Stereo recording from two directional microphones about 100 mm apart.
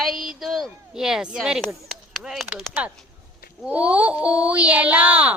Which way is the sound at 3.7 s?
15° right (ahead or behind).